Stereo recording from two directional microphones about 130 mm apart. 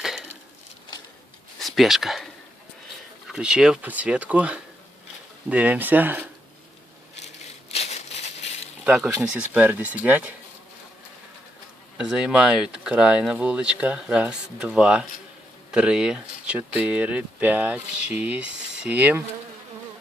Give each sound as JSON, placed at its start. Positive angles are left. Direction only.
{"t": 1.5, "sound": "speech", "side_deg": 0}
{"t": 7.7, "sound": "crushing", "side_deg": 55}
{"t": 8.8, "sound": "speech", "side_deg": -5}
{"t": 11.9, "sound": "speech", "side_deg": -5}